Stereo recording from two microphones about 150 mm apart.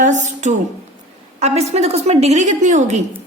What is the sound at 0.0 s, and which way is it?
A woman's voice, 55° right (ahead or behind).